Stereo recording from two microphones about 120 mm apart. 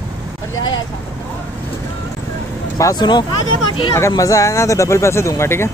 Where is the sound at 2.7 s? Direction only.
35° left (ahead or behind).